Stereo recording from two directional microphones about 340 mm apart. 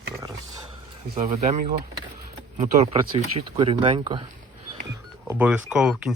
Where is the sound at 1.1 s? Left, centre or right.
Centre.